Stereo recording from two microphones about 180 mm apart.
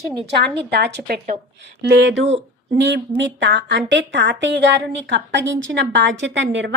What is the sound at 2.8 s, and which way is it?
A woman's voice, 85° right.